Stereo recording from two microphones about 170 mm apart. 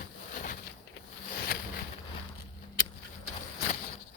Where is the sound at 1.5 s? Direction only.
60° left (ahead or behind).